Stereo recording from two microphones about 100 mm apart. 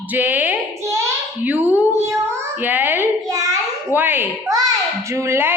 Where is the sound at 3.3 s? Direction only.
35° right (ahead or behind).